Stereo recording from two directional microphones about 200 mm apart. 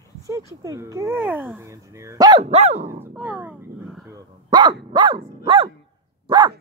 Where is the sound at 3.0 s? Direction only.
5° right (ahead or behind).